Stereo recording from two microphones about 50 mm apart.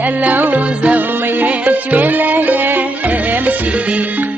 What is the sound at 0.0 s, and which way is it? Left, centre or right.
Music, right.